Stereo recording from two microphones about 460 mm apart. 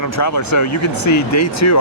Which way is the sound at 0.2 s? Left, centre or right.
Left.